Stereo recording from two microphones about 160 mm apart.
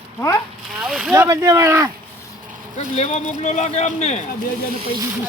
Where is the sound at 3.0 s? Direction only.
45° left (ahead or behind).